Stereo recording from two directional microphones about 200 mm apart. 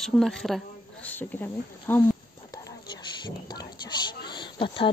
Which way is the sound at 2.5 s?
20° left (ahead or behind).